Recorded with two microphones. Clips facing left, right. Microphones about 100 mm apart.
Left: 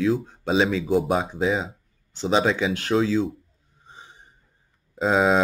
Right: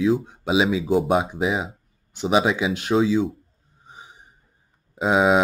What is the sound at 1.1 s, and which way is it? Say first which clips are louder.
Speech: right 1 dB; 15° right (ahead or behind).